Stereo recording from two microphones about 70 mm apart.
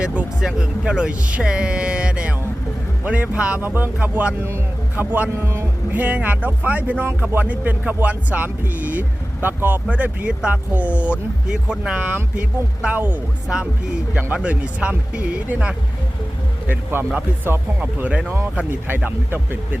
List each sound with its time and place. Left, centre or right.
0.4 s speech: centre
14.1 s speech: right
16.6 s speech: right
17.7 s speech: centre